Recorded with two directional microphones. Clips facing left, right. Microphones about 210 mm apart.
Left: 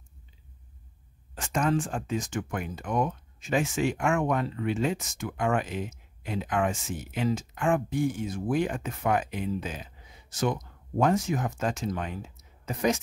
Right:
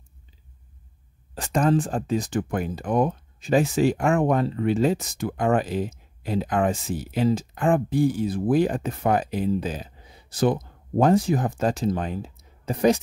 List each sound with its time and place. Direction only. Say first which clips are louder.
1.3 s speech: right 5 dB; 35° right (ahead or behind)